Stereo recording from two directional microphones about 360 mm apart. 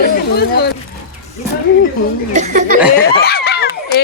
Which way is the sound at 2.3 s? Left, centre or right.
Centre.